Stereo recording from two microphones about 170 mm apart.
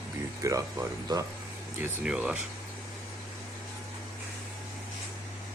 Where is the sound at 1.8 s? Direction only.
5° right (ahead or behind).